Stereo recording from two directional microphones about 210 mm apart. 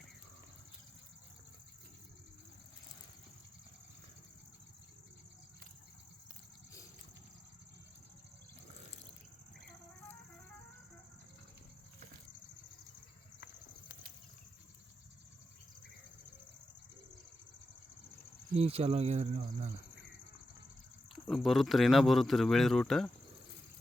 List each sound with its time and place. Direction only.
18.5 s speech: 30° right (ahead or behind)
21.2 s speech: centre (ahead or behind)